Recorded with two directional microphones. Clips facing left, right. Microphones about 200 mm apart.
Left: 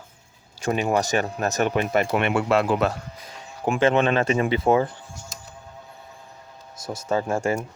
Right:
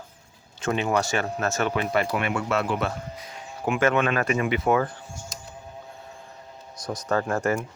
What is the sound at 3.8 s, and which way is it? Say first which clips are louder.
Speech: left 3 dB; 30° left (ahead or behind).